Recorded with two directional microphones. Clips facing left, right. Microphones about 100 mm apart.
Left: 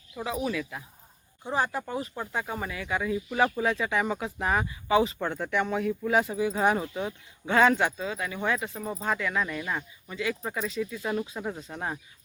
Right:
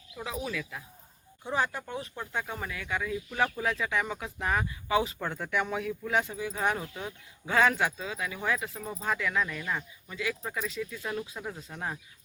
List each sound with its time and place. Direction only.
0.2 s speech: 5° left (ahead or behind)
1.5 s speech: 35° left (ahead or behind)
1.7 s speech: 10° left (ahead or behind)
10.4 s speech: 15° left (ahead or behind)